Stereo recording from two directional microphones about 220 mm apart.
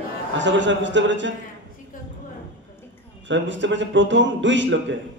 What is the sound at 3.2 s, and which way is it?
Mantra, 55° right (ahead or behind).